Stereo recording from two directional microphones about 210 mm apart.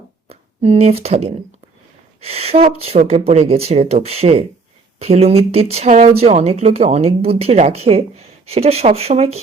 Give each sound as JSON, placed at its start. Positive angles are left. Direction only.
{"t": 0.3, "sound": "speech", "side_deg": -30}